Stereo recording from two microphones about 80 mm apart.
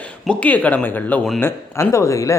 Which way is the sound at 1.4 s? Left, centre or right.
Left.